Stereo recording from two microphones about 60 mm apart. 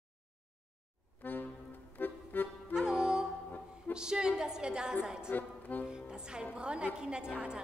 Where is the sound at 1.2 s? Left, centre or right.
Left.